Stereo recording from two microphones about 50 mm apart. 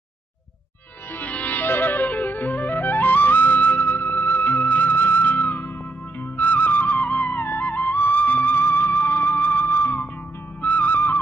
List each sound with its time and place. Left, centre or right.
1.1 s music: left